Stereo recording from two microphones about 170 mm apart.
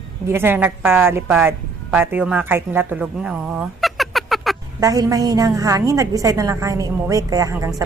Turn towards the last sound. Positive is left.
turn(degrees=-20)  # may be behind; listen again after turning